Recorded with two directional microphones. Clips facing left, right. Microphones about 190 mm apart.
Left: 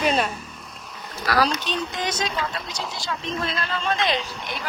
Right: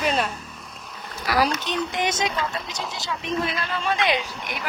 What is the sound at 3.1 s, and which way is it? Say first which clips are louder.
Speech: right 2 dB; 15° right (ahead or behind).